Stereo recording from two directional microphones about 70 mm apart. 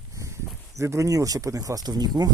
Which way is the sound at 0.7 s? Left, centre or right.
Right.